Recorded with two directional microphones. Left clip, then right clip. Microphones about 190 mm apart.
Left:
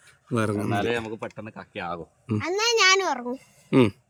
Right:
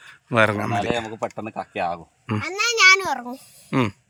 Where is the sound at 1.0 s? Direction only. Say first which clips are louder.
Right 6 dB; 35° right (ahead or behind).